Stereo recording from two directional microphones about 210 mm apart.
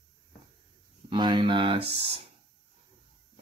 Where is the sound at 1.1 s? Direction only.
20° right (ahead or behind).